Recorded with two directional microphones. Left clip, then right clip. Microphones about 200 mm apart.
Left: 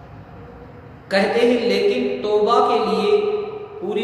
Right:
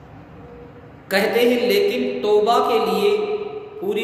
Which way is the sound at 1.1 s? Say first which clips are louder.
Even; 60° right (ahead or behind).